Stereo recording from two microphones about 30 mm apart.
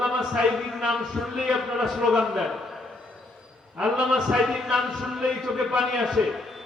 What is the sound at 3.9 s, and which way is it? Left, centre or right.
Speech, right.